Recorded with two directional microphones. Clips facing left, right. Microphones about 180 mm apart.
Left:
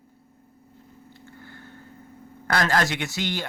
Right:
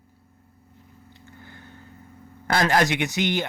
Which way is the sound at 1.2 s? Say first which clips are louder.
Left 1 dB; 15° right (ahead or behind).